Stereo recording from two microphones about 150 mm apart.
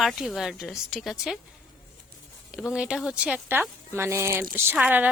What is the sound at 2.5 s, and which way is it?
Speech, 5° right (ahead or behind).